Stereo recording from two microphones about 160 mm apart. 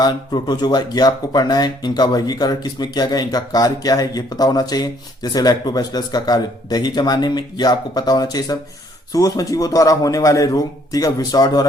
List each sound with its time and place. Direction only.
0.0 s speech: 25° left (ahead or behind)